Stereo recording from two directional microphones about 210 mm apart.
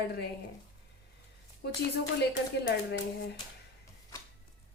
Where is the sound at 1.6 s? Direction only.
50° left (ahead or behind).